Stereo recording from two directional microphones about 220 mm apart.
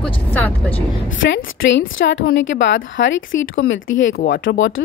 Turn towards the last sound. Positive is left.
turn(degrees=55)  # may be behind; listen again after turning